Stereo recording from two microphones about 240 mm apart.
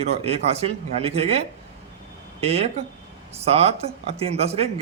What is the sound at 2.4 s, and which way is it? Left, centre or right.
Speech, right.